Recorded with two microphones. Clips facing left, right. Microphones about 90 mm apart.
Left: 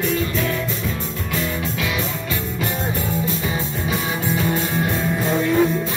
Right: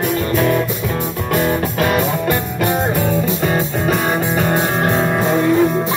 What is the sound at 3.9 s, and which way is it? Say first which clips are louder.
Music: right 5 dB; 65° right (ahead or behind).